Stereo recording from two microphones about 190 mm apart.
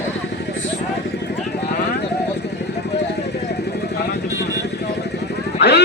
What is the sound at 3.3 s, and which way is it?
Vehicle, 60° left (ahead or behind).